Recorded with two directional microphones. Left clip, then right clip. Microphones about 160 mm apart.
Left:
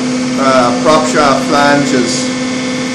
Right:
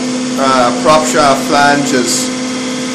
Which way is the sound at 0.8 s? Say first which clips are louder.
Even; 35° right (ahead or behind).